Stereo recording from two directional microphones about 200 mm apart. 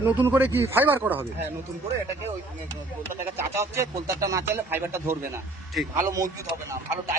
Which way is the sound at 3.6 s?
15° right (ahead or behind).